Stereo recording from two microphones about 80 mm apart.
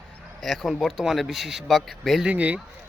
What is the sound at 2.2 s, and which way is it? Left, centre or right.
Speech, centre.